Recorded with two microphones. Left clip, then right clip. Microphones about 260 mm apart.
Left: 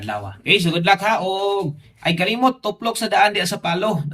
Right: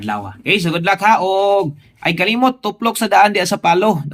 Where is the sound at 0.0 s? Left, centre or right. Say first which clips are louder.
Right 4 dB; centre.